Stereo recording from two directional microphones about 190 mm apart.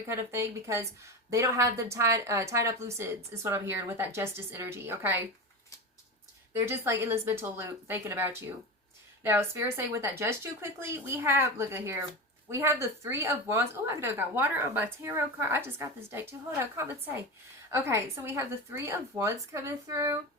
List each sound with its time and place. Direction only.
0.1 s speech: 15° right (ahead or behind)
6.5 s speech: 15° right (ahead or behind)